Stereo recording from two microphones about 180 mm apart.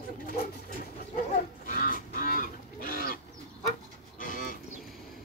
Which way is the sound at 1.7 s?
50° left (ahead or behind).